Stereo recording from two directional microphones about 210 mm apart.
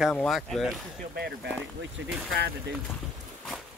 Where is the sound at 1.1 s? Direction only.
50° right (ahead or behind).